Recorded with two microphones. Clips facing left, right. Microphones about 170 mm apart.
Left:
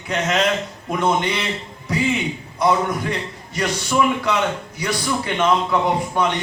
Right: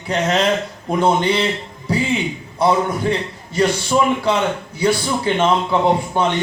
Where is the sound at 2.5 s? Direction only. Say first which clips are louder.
Right 2 dB; 30° right (ahead or behind).